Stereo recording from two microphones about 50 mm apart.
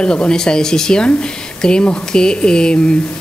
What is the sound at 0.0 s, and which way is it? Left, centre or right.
A woman's voice, centre.